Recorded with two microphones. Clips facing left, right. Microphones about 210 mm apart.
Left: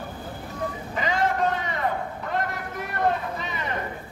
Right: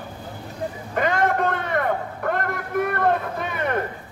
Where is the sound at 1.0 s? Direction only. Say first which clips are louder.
Right 3 dB; 55° right (ahead or behind).